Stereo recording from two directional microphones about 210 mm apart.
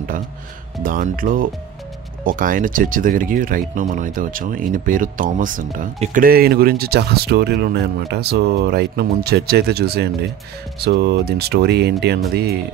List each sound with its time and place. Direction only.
0.1 s speech: 40° right (ahead or behind)